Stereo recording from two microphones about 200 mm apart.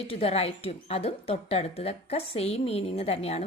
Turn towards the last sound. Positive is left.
turn(degrees=30)  # may be behind; listen again after turning